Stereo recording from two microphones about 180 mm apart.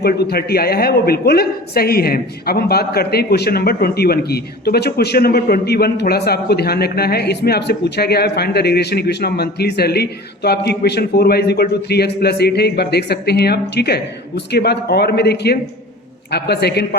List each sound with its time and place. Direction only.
0.0 s speech: 60° left (ahead or behind)